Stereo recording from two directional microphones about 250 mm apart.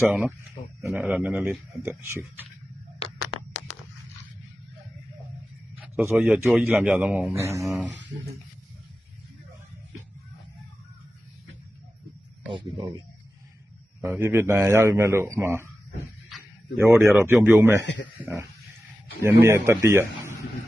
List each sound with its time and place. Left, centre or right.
0.0 s a man's voice: centre
6.0 s a man's voice: centre
12.5 s speech: centre
14.0 s a man's voice: centre
16.7 s a man's voice: centre
19.2 s a man's voice: centre